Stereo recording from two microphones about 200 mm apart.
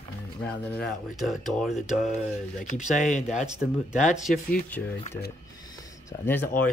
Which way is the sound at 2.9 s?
40° left (ahead or behind).